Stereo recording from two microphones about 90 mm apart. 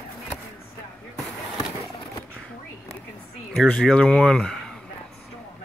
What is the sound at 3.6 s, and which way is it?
Speech, 5° left (ahead or behind).